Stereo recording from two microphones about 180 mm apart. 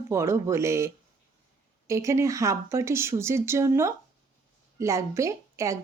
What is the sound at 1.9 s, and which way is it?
A woman's voice, 15° right (ahead or behind).